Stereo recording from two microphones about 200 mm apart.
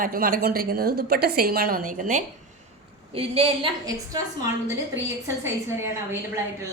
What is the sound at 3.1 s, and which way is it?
Speech, 30° right (ahead or behind).